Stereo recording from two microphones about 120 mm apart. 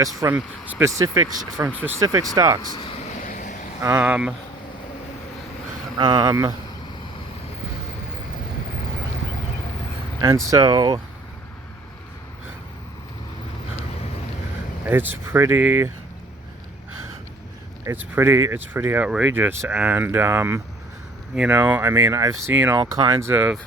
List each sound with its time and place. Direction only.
0.0 s speech: 30° right (ahead or behind)
3.3 s vehicle: 90° left
3.8 s speech: 25° right (ahead or behind)
4.0 s speech: 10° right (ahead or behind)
6.0 s speech: 35° right (ahead or behind)
10.2 s speech: 25° right (ahead or behind)
14.8 s speech: 15° right (ahead or behind)
17.8 s speech: 20° right (ahead or behind)
22.5 s speech: 15° right (ahead or behind)
22.9 s speech: 25° right (ahead or behind)
23.3 s speech: 15° right (ahead or behind)